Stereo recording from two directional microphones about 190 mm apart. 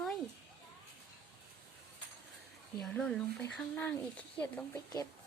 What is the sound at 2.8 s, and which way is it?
Speech, 5° left (ahead or behind).